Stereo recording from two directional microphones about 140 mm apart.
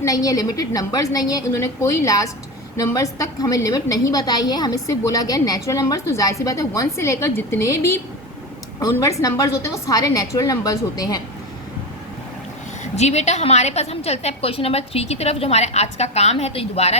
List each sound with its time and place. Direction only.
0.0 s a woman's voice: 25° left (ahead or behind)
12.8 s a woman's voice: 50° left (ahead or behind)